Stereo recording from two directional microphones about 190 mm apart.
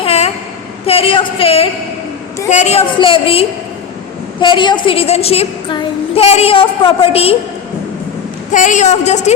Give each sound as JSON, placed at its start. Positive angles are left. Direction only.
{"t": 0.0, "sound": "a sound", "side_deg": 35}
{"t": 0.9, "sound": "a woman's voice", "side_deg": 30}
{"t": 8.5, "sound": "a woman's voice", "side_deg": 40}